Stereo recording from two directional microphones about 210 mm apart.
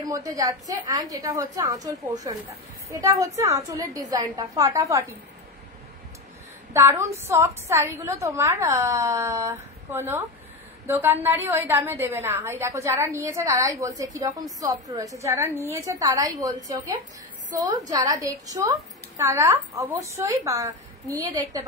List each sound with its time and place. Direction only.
0.0 s a woman's voice: 15° right (ahead or behind)
6.7 s a woman's voice: 10° right (ahead or behind)